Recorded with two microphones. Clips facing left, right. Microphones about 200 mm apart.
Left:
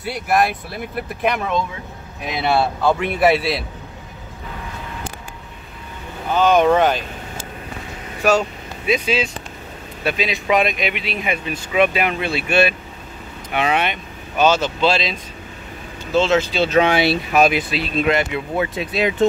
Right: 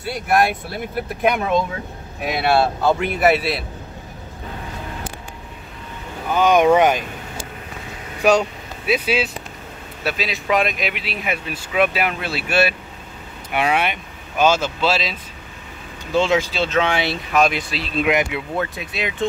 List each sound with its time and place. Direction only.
0.3 s speech: centre (ahead or behind)
6.3 s speech: 10° right (ahead or behind)
8.2 s speech: 15° right (ahead or behind)
17.3 s speech: 5° left (ahead or behind)
18.0 s speech: 10° right (ahead or behind)
18.8 s speech: 35° left (ahead or behind)